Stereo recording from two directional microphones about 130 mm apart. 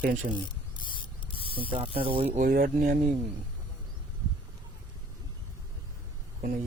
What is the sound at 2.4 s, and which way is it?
Speech, 85° right.